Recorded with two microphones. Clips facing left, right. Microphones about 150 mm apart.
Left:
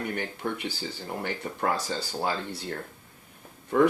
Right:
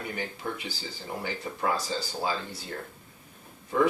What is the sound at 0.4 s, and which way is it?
Speech, 50° left (ahead or behind).